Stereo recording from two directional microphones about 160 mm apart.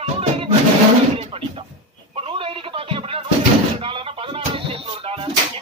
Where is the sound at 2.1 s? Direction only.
35° right (ahead or behind).